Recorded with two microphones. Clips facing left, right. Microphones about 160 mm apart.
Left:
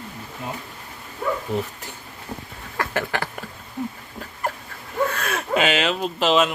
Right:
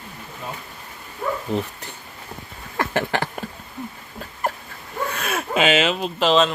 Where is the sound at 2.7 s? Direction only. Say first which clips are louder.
Right 3 dB; 25° right (ahead or behind).